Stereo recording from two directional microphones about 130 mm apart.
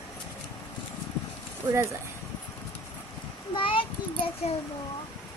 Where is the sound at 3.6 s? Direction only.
40° left (ahead or behind).